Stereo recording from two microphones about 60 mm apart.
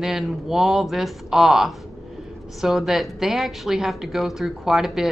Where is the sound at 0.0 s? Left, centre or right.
Centre.